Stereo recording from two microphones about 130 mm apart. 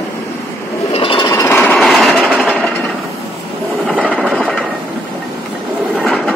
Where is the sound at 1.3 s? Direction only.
20° left (ahead or behind).